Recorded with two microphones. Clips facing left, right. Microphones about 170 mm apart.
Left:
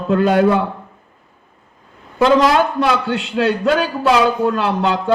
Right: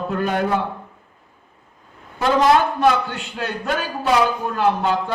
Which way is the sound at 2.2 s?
85° left.